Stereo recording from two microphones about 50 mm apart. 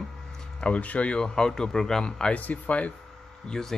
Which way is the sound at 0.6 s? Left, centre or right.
Left.